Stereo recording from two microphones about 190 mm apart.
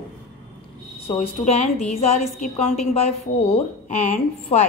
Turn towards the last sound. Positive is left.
turn(degrees=35)  # may be behind; listen again after turning